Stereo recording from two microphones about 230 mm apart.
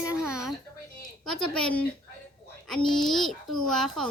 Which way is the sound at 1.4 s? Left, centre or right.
Centre.